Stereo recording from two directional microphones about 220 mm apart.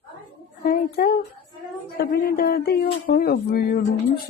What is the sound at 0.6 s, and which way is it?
A child's voice, 40° left (ahead or behind).